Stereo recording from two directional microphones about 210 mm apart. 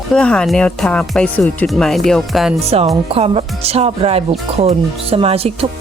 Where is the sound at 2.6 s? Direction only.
30° right (ahead or behind).